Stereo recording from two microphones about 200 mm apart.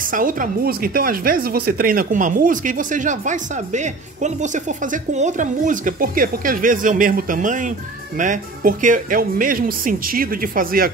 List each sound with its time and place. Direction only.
0.0 s speech: 45° right (ahead or behind)